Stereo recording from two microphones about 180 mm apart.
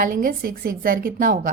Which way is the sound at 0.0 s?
50° right (ahead or behind).